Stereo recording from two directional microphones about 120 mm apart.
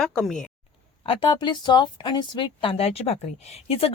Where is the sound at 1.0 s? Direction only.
45° left (ahead or behind).